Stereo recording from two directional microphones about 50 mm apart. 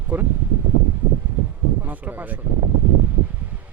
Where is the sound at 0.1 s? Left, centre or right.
Right.